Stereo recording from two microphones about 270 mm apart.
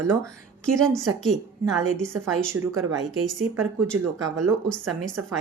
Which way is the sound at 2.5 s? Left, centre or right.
Right.